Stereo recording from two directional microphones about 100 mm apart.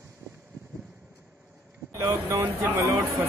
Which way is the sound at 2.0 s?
30° right (ahead or behind).